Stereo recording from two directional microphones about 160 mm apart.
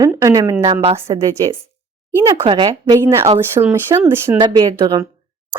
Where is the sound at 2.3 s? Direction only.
30° right (ahead or behind).